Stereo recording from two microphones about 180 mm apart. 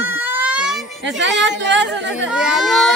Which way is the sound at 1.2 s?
90° right.